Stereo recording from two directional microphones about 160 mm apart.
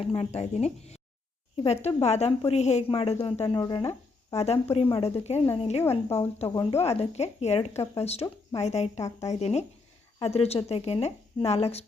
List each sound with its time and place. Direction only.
0.0 s a woman's voice: 40° left (ahead or behind)
4.4 s a woman's voice: 40° left (ahead or behind)